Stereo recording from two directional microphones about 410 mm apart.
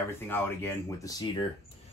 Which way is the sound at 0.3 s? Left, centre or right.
Centre.